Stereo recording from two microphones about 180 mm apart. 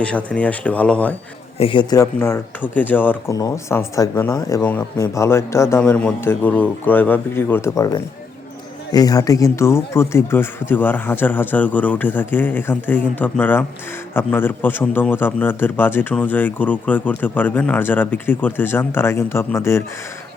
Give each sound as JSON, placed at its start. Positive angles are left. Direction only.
{"t": 0.0, "sound": "a man's voice", "side_deg": 5}
{"t": 1.5, "sound": "a man's voice", "side_deg": 30}
{"t": 2.1, "sound": "a man's voice", "side_deg": 15}
{"t": 8.9, "sound": "a man's voice", "side_deg": 20}